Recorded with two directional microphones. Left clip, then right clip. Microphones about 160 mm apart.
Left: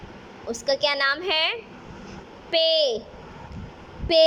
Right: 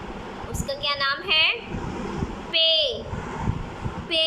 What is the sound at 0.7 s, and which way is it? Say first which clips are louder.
A woman's voice: left 3 dB; 45° left (ahead or behind).